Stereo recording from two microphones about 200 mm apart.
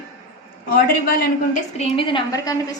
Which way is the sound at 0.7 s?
50° left (ahead or behind).